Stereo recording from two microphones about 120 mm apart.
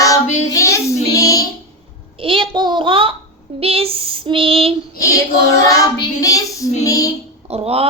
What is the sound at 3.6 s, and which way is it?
Female singing, 55° right (ahead or behind).